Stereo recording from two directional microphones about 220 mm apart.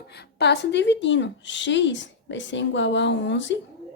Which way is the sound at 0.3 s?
50° left (ahead or behind).